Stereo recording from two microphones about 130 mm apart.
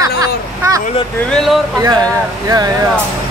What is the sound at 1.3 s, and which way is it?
Speech, centre (ahead or behind).